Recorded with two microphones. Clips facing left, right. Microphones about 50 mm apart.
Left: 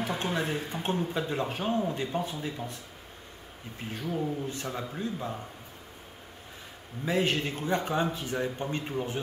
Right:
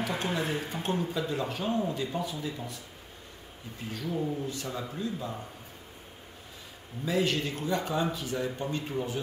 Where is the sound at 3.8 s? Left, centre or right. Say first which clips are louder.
Even; left.